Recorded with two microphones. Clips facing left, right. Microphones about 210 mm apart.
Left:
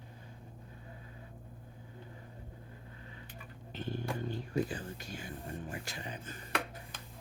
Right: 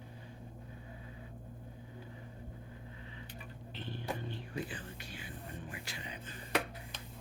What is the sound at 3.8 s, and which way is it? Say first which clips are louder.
Whispering: left 4 dB; 45° left (ahead or behind).